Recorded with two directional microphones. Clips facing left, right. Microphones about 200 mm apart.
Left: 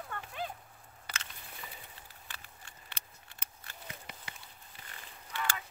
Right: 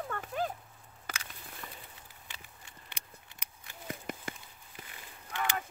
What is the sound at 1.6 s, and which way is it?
Bird, 50° right (ahead or behind).